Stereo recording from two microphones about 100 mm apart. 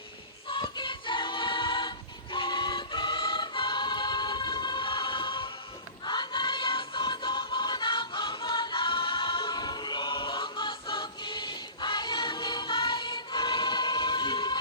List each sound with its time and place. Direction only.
0.6 s choir: 55° left (ahead or behind)
6.1 s music: 50° left (ahead or behind)